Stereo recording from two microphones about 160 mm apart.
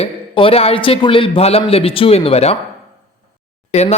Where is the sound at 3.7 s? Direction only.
40° left (ahead or behind).